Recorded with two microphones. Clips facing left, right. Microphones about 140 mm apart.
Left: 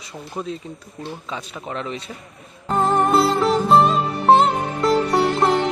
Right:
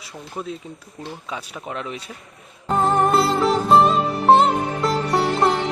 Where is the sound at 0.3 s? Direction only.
5° right (ahead or behind).